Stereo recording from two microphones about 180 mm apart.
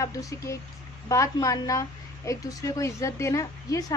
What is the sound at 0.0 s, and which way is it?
A woman's voice, 15° left (ahead or behind).